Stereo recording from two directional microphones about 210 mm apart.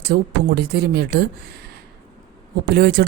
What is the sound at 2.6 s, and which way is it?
Speech, 50° right (ahead or behind).